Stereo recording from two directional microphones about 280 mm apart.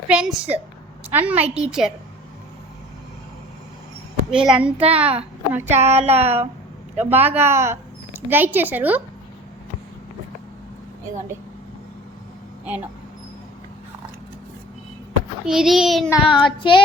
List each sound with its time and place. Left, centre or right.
0.1 s a child's voice: centre
4.3 s a child's voice: centre
5.8 s a sound: right
6.9 s speech: centre
15.4 s a child's voice: centre
16.0 s child singing: centre